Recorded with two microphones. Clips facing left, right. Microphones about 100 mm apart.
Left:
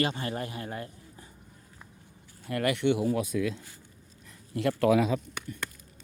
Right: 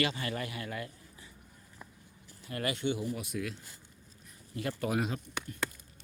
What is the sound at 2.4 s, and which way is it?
Speech, 60° left (ahead or behind).